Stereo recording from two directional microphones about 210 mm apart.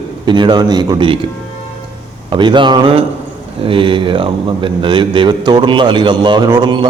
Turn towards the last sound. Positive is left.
turn(degrees=-20)  # may be behind; listen again after turning